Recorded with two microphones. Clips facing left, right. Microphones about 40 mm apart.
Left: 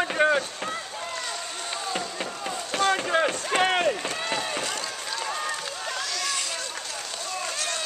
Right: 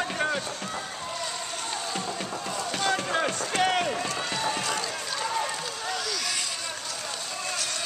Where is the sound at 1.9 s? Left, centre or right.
Centre.